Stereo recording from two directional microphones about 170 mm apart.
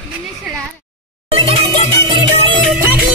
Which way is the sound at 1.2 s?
35° right (ahead or behind).